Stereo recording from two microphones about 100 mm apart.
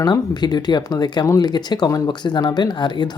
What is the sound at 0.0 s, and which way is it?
Speech, 40° left (ahead or behind).